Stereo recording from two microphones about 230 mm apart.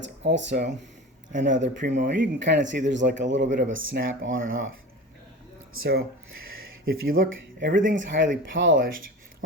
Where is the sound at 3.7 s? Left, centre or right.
Right.